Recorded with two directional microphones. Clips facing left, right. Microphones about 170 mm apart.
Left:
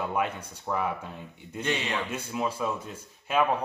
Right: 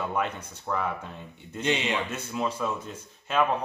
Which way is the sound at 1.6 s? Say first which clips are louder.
Right 3 dB; 20° right (ahead or behind).